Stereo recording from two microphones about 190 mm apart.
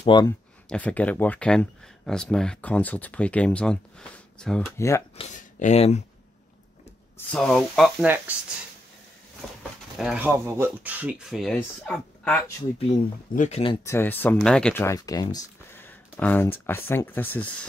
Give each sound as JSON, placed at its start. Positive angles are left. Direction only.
{"t": 0.0, "sound": "speech", "side_deg": 25}
{"t": 0.7, "sound": "speech", "side_deg": 5}
{"t": 4.7, "sound": "speech", "side_deg": 15}
{"t": 5.1, "sound": "speech", "side_deg": 35}
{"t": 7.2, "sound": "speech", "side_deg": 5}
{"t": 9.6, "sound": "speech", "side_deg": 0}
{"t": 13.3, "sound": "speech", "side_deg": 40}
{"t": 13.8, "sound": "speech", "side_deg": 10}